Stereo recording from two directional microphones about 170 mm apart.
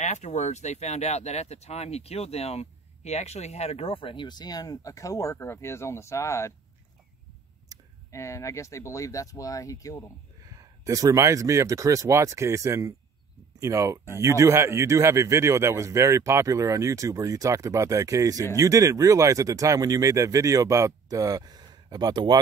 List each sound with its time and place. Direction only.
0.0 s speech: 45° left (ahead or behind); by 6.5 s 15° left (ahead or behind)
7.7 s a sound: 20° right (ahead or behind)
8.1 s speech: 15° left (ahead or behind)
10.4 s speech: 20° right (ahead or behind)